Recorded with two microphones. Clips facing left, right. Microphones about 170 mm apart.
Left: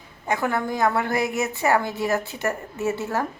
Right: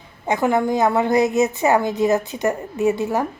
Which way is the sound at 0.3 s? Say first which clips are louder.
Right 6 dB; 20° right (ahead or behind).